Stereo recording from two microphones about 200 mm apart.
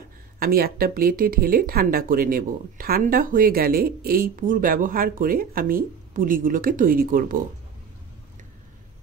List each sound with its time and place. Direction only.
0.4 s speech: 50° right (ahead or behind)